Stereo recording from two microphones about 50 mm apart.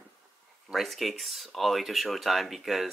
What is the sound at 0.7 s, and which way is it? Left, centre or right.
Speech, centre.